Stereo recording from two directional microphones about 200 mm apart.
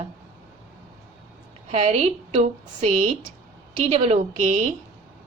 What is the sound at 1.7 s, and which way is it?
A woman's voice, 35° right (ahead or behind).